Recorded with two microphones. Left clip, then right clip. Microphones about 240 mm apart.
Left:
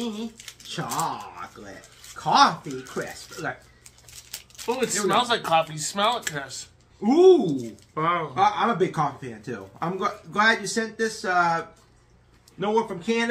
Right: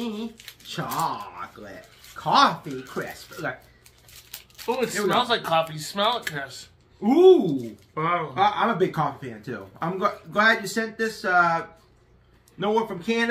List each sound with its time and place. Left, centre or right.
0.0 s speech: centre
4.3 s speech: centre
7.0 s a man's voice: centre
7.5 s speech: centre
8.4 s a man's voice: centre